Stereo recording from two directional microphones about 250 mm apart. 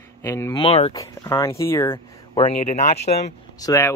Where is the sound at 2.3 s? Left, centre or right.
Left.